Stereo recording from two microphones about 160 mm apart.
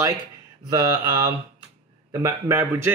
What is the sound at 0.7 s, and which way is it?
Mantra, 25° right (ahead or behind).